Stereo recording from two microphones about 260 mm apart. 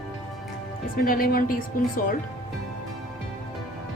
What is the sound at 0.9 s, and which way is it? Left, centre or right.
Speech, left.